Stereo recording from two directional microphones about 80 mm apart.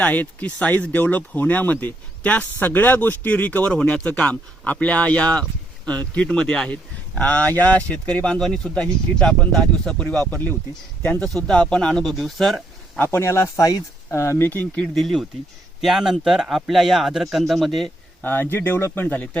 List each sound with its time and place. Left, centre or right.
0.0 s speech: left
11.2 s speech: centre
13.0 s speech: left
14.9 s speech: centre
18.2 s speech: left
19.0 s speech: centre